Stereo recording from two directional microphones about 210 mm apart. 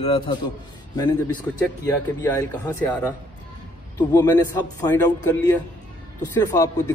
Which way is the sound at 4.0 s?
15° left (ahead or behind).